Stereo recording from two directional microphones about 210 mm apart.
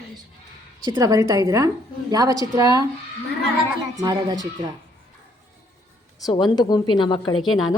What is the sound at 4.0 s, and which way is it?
Speech, 20° right (ahead or behind).